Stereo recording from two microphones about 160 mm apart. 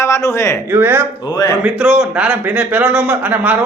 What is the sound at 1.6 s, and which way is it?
Speech, 5° right (ahead or behind).